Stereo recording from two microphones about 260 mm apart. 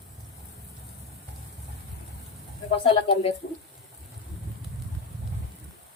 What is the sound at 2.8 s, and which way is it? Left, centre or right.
Speech, left.